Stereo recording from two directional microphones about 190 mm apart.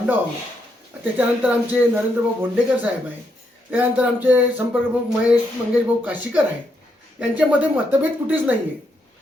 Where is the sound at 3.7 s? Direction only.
10° right (ahead or behind).